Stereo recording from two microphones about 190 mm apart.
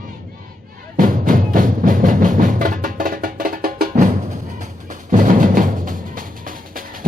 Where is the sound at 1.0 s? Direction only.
45° right (ahead or behind).